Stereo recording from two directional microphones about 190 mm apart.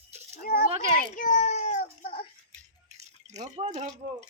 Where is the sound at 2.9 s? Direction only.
35° right (ahead or behind).